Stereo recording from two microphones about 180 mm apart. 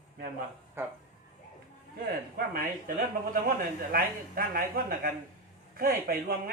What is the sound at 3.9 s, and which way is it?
A man's voice, 55° right (ahead or behind).